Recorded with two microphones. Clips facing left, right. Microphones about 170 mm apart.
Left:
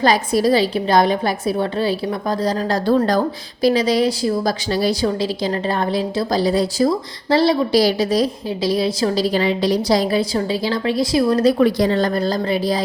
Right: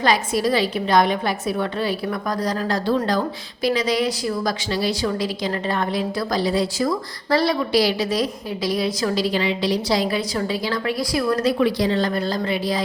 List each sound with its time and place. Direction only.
0.0 s a woman's voice: 35° left (ahead or behind)
11.6 s a woman's voice: 45° left (ahead or behind)